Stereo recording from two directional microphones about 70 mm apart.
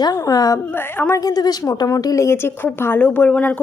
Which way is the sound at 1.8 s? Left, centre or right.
Left.